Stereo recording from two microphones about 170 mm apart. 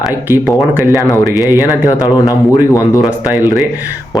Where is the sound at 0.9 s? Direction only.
20° left (ahead or behind).